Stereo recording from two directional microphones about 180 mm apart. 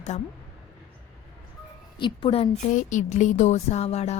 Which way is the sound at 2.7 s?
45° left (ahead or behind).